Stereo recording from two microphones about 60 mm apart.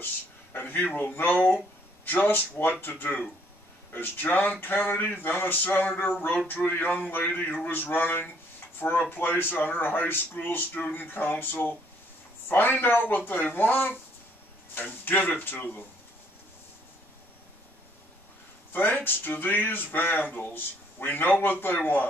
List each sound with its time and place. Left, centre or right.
0.0 s speech: left
18.7 s speech: left